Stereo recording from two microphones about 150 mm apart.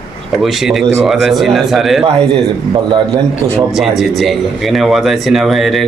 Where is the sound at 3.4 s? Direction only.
20° right (ahead or behind).